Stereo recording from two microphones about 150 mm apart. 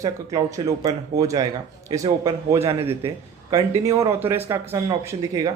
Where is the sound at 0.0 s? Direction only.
20° right (ahead or behind).